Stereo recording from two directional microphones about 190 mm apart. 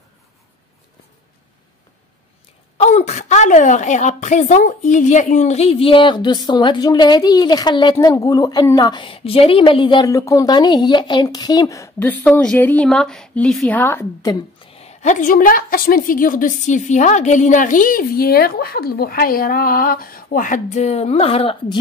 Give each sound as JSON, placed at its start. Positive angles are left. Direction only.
{"t": 2.8, "sound": "a woman's voice", "side_deg": 35}
{"t": 14.6, "sound": "a woman's voice", "side_deg": 30}